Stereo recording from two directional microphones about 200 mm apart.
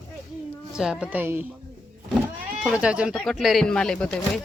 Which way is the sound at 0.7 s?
5° right (ahead or behind).